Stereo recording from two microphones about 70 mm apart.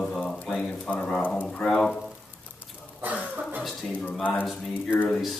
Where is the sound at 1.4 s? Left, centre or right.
Centre.